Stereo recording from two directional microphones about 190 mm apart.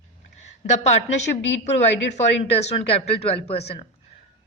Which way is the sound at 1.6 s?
35° left (ahead or behind).